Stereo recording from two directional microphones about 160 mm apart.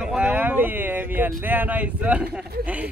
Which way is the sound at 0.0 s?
10° right (ahead or behind).